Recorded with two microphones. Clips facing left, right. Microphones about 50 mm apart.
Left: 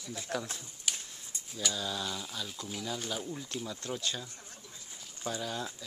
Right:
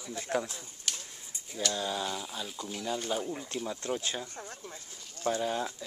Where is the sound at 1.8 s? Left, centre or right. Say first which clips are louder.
Right 3 dB; right.